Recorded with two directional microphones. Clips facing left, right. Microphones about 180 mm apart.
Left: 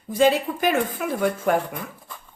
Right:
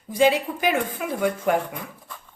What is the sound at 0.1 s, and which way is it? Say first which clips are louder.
Speech: left 1 dB; 15° right (ahead or behind).